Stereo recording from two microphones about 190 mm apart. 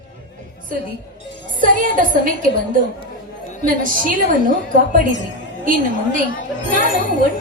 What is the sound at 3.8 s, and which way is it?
Speech, 45° right (ahead or behind).